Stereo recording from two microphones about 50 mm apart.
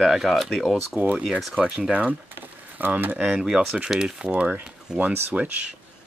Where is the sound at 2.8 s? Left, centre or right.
Right.